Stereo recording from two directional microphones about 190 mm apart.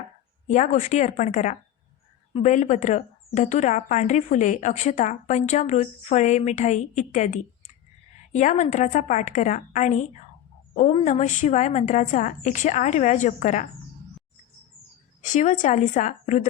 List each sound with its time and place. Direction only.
0.4 s speech: 40° left (ahead or behind)
15.3 s speech: 40° left (ahead or behind)